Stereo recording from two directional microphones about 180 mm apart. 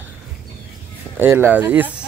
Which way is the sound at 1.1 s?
10° right (ahead or behind).